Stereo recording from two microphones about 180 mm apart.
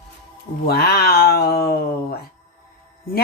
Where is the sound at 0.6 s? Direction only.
60° left (ahead or behind).